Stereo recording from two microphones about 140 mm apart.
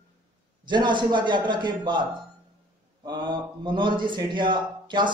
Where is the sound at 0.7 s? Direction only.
35° right (ahead or behind).